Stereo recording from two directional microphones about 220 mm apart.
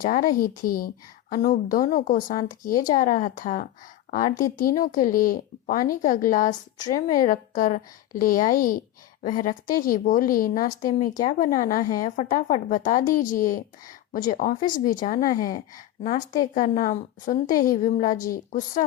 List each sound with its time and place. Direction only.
0.0 s a woman's voice: 35° left (ahead or behind)
16.6 s a woman's voice: 35° left (ahead or behind)